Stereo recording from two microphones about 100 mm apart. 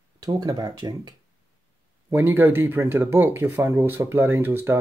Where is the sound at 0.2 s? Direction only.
40° right (ahead or behind).